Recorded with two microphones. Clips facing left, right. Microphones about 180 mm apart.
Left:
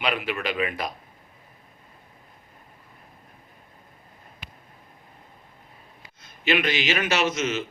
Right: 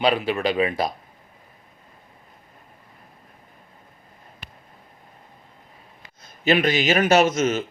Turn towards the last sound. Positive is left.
turn(degrees=-45)  # may be behind; listen again after turning